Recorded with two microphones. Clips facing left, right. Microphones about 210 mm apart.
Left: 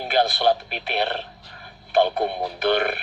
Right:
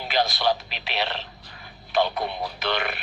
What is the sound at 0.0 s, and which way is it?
A man's voice, 50° left (ahead or behind).